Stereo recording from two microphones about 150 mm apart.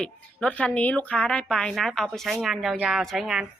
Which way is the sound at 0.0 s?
5° left (ahead or behind).